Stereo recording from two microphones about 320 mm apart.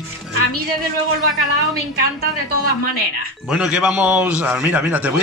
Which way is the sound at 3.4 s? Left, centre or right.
Centre.